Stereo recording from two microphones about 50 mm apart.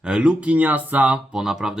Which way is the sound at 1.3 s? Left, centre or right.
Centre.